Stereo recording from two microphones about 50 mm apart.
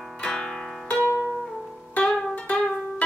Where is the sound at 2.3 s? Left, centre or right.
Left.